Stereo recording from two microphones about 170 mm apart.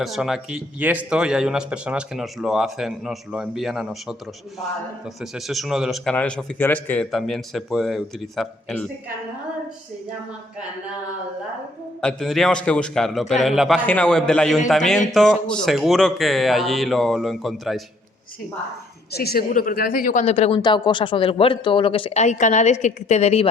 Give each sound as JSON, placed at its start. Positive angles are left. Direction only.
{"t": 0.0, "sound": "speech", "side_deg": 0}
{"t": 5.2, "sound": "speech", "side_deg": 0}
{"t": 11.9, "sound": "speech", "side_deg": 0}
{"t": 19.1, "sound": "speech", "side_deg": 65}
{"t": 20.2, "sound": "speech", "side_deg": 40}
{"t": 20.6, "sound": "speech", "side_deg": 25}